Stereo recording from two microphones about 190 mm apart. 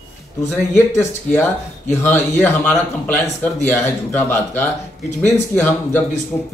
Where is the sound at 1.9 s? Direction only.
10° left (ahead or behind).